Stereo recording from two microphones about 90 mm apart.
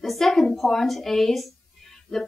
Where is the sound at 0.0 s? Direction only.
Centre (ahead or behind).